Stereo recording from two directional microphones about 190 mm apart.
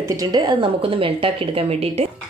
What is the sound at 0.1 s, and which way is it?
A woman's voice, 20° right (ahead or behind).